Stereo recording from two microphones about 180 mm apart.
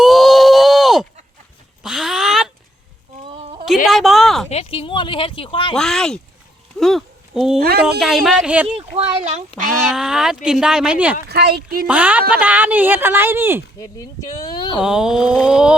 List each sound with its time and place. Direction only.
0.0 s a sound: centre (ahead or behind)
3.2 s a sound: 35° right (ahead or behind)
3.8 s speech: centre (ahead or behind)
4.4 s speech: 35° left (ahead or behind)
5.7 s speech: 5° left (ahead or behind)
8.6 s speech: 35° right (ahead or behind)
9.9 s speech: 5° right (ahead or behind)
11.3 s speech: 65° right (ahead or behind)
11.9 s speech: 10° right (ahead or behind)
13.7 s speech: 20° left (ahead or behind)
14.8 s speech: 5° right (ahead or behind)